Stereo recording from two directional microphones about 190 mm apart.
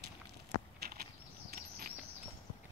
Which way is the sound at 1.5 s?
50° right (ahead or behind).